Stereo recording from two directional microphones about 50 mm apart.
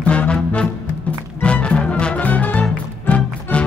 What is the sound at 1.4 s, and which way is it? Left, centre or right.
Music, left.